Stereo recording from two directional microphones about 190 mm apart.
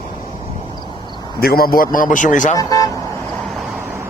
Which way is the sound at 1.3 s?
50° left (ahead or behind).